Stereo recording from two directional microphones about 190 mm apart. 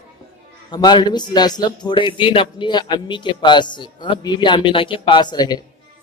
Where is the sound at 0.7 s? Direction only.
25° left (ahead or behind).